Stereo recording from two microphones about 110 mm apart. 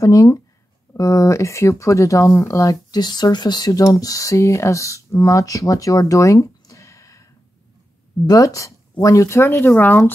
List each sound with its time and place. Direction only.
0.0 s speech: 30° left (ahead or behind)
8.3 s speech: 35° left (ahead or behind); by 10.1 s 15° left (ahead or behind)